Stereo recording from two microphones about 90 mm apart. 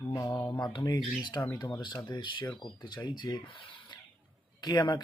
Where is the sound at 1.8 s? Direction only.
55° left (ahead or behind).